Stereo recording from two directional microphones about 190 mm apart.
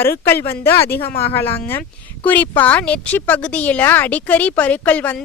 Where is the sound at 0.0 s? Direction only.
10° left (ahead or behind).